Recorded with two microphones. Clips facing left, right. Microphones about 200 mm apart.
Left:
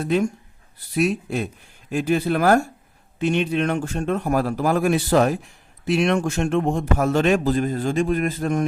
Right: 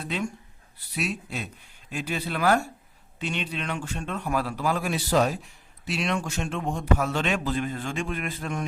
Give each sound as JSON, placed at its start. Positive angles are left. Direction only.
{"t": 0.0, "sound": "speech", "side_deg": 45}